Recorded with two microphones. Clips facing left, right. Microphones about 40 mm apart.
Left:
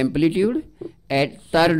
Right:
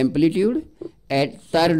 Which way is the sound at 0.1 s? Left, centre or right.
Centre.